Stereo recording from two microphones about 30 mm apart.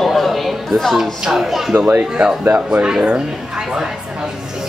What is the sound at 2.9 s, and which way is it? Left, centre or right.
Speech, right.